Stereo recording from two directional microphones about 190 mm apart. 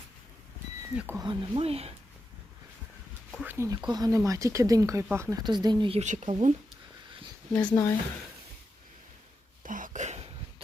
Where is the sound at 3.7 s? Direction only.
20° right (ahead or behind); by 6.5 s 40° right (ahead or behind).